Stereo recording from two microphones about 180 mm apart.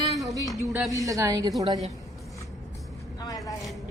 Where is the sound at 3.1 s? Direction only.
20° left (ahead or behind).